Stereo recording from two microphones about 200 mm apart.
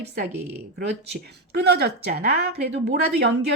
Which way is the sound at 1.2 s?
55° right (ahead or behind).